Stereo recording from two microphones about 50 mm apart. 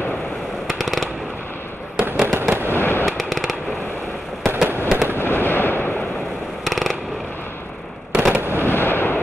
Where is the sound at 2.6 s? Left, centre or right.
Left.